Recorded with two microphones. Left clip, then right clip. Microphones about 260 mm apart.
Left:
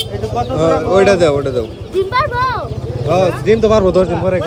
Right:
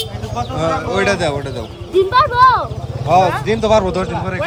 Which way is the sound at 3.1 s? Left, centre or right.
Centre.